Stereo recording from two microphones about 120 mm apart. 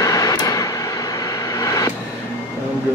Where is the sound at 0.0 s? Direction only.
25° left (ahead or behind).